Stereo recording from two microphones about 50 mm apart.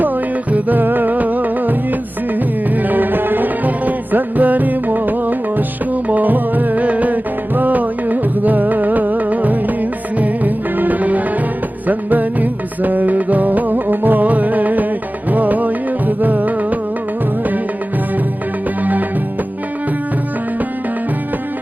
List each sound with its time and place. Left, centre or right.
0.5 s music: right
2.7 s music: right
18.8 s music: right